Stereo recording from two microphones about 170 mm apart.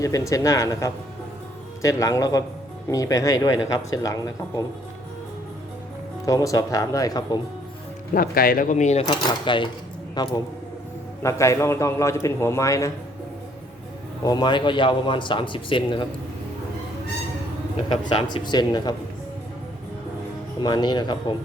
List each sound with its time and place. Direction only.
0.0 s speech: 20° left (ahead or behind)
6.2 s speech: 20° left (ahead or behind)
8.1 s speech: 60° left (ahead or behind)
9.0 s a man's voice: 30° left (ahead or behind)
14.3 s speech: 25° left (ahead or behind)
17.8 s speech: 30° left (ahead or behind)
20.6 s speech: 25° left (ahead or behind)